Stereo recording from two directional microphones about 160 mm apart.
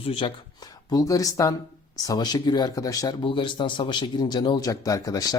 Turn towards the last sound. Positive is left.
turn(degrees=20)  # may be behind; listen again after turning